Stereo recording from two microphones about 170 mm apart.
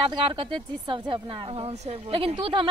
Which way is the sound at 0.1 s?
30° right (ahead or behind).